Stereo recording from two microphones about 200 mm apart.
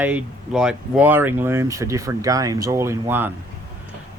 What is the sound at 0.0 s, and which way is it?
Speech, 5° right (ahead or behind).